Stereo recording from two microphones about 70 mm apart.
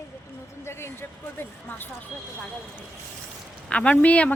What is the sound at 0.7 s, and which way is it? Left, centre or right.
A woman's voice, left.